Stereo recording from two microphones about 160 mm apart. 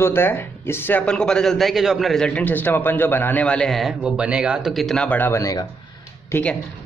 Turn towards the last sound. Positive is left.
turn(degrees=10)  # may be behind; listen again after turning